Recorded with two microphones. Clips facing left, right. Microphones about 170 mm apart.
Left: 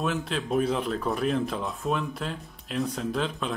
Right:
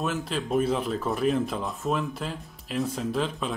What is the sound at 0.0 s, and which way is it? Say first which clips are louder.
Speech: even; centre (ahead or behind).